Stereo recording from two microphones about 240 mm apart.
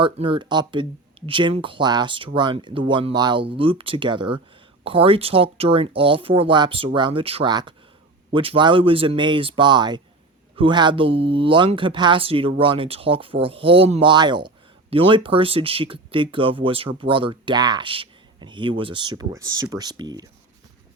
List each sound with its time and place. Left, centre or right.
0.0 s speech: right